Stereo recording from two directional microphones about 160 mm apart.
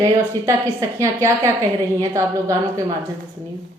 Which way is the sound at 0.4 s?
20° right (ahead or behind).